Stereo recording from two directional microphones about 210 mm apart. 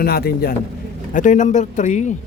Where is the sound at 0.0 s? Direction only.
45° left (ahead or behind).